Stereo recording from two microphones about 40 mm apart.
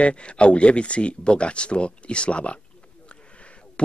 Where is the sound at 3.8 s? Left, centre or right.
Left.